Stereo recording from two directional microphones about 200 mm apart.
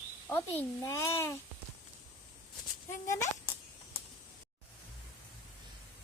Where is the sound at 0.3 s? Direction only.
10° left (ahead or behind).